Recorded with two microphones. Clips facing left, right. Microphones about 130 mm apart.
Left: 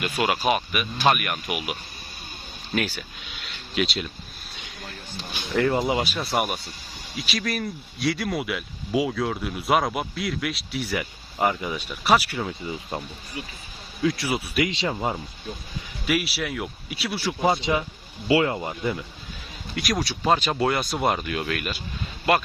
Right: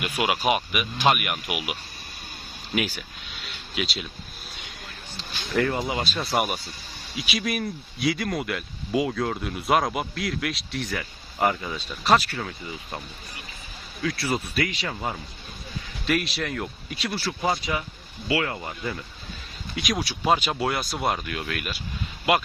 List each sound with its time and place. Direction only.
0.0 s speech: 10° right (ahead or behind)
2.7 s speech: 10° right (ahead or behind)
3.3 s speech: centre (ahead or behind)
4.5 s a sound: centre (ahead or behind)
5.3 s speech: 15° left (ahead or behind)
6.1 s speech: centre (ahead or behind); by 13.0 s 20° left (ahead or behind)
14.0 s speech: 25° left (ahead or behind)
14.3 s speech: 10° left (ahead or behind)
14.7 s speech: 25° left (ahead or behind)
16.0 s speech: 10° left (ahead or behind)
17.4 s speech: 25° left (ahead or behind)
19.7 s speech: centre (ahead or behind)